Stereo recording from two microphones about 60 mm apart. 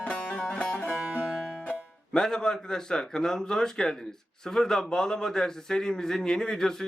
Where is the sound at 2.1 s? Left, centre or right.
Centre.